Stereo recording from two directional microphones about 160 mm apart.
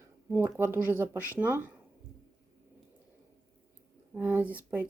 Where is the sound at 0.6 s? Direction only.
15° right (ahead or behind).